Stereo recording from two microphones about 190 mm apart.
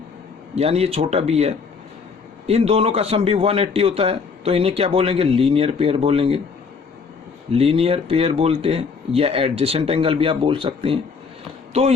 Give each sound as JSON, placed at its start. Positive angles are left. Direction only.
{"t": 0.5, "sound": "speech", "side_deg": -30}
{"t": 7.5, "sound": "speech", "side_deg": -30}